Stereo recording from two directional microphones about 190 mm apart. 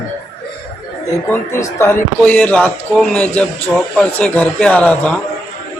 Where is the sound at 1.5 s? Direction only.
15° left (ahead or behind).